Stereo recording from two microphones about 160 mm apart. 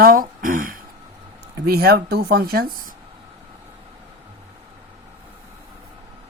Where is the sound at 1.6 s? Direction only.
75° right (ahead or behind).